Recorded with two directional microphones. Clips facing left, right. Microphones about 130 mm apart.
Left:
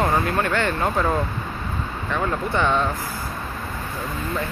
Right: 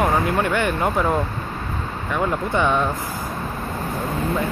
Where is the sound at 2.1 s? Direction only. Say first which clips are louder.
Right 2 dB; 15° right (ahead or behind).